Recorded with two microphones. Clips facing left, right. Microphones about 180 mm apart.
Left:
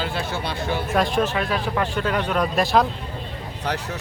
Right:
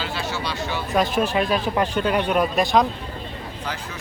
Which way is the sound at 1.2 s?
20° right (ahead or behind).